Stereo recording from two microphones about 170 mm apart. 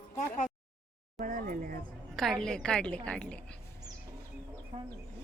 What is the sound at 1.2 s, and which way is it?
Speech, 55° right (ahead or behind).